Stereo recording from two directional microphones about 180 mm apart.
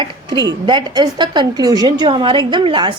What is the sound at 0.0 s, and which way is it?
A woman's voice, 25° right (ahead or behind).